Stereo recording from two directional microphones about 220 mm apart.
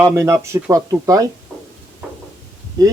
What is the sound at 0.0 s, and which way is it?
Speech, 10° right (ahead or behind).